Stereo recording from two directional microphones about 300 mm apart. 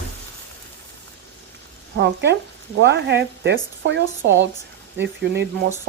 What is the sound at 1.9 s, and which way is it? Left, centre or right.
Speech, right.